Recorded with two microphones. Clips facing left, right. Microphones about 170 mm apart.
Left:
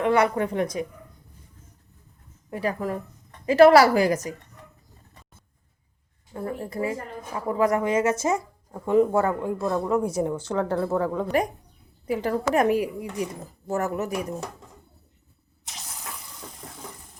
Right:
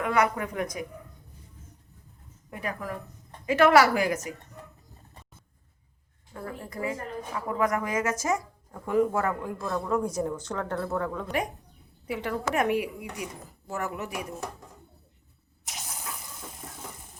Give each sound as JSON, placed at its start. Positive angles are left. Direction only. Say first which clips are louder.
{"t": 0.0, "sound": "a woman's voice", "louder": "left 4 dB", "side_deg": 30}
{"t": 2.5, "sound": "a woman's voice", "louder": "left 7 dB", "side_deg": 30}
{"t": 6.3, "sound": "a woman's voice", "louder": "left 6 dB", "side_deg": 30}